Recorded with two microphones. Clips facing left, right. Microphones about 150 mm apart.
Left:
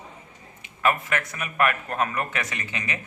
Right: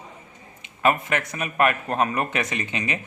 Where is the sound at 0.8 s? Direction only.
25° right (ahead or behind).